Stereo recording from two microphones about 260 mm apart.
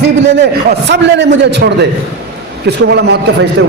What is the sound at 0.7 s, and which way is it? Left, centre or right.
A man's voice, right.